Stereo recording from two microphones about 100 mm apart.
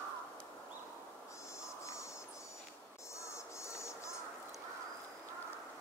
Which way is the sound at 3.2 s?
30° left (ahead or behind).